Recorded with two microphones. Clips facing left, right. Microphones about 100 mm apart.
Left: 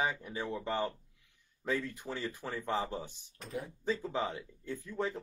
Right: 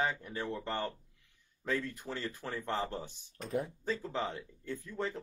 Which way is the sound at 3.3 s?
45° right (ahead or behind).